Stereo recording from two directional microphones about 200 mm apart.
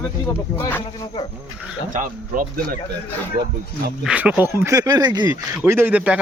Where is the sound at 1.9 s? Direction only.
40° right (ahead or behind).